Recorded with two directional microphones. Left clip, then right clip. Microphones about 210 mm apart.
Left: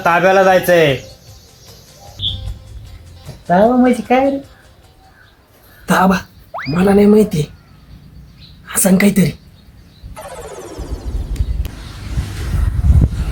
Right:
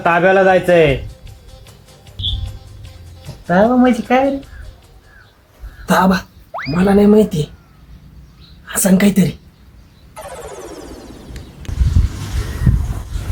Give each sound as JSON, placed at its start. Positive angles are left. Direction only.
{"t": 0.0, "sound": "a man's voice", "side_deg": -25}
{"t": 3.4, "sound": "speech", "side_deg": 0}
{"t": 5.8, "sound": "speech", "side_deg": 0}
{"t": 8.6, "sound": "speech", "side_deg": 0}
{"t": 10.2, "sound": "music", "side_deg": 0}